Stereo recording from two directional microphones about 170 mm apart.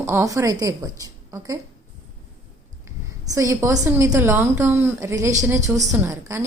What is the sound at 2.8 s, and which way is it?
A woman's voice, 20° right (ahead or behind).